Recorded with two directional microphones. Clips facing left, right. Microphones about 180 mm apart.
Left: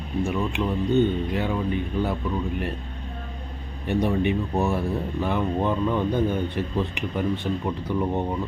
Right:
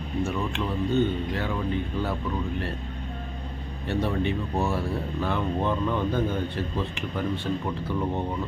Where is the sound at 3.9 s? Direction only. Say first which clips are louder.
Left 4 dB; 15° left (ahead or behind).